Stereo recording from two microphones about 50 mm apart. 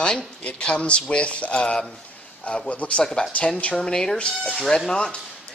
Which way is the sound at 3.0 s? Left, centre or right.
Centre.